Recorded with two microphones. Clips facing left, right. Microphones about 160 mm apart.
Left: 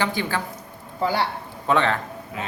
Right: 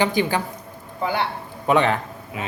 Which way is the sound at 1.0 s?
35° left (ahead or behind).